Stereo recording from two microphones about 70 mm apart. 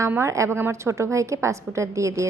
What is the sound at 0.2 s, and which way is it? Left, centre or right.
A woman's voice, right.